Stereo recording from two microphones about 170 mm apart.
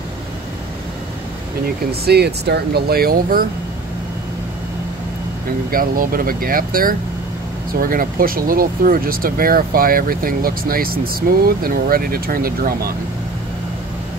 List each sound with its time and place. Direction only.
1.9 s speech: 70° right (ahead or behind)
5.7 s speech: 55° right (ahead or behind)